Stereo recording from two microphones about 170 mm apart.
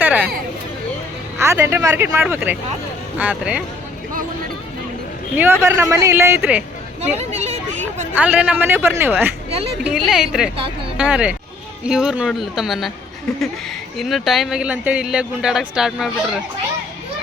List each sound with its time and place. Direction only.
0.0 s a sound: 10° right (ahead or behind)
1.4 s a woman's voice: 15° right (ahead or behind)
5.4 s a woman's voice: 15° right (ahead or behind)
7.2 s speech: 40° right (ahead or behind)
8.1 s a woman's voice: 10° right (ahead or behind)
14.0 s speech: centre (ahead or behind)